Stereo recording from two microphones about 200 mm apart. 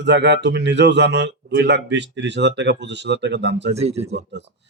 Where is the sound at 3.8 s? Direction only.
30° right (ahead or behind).